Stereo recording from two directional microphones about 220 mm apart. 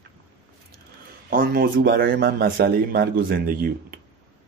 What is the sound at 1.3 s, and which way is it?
Speech, 40° right (ahead or behind).